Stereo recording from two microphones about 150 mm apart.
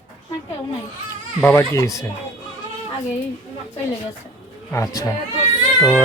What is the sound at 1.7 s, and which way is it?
Speech, 20° left (ahead or behind).